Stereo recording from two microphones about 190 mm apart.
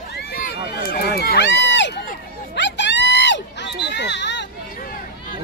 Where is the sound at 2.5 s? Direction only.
70° left (ahead or behind).